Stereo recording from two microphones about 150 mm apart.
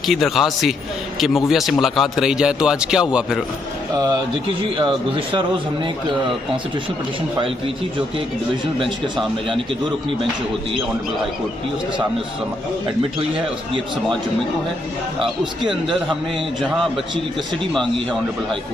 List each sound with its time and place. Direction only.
0.0 s a man's voice: centre (ahead or behind)
4.7 s speech: 35° right (ahead or behind)
7.3 s speech: 35° right (ahead or behind)
15.2 s a man's voice: centre (ahead or behind)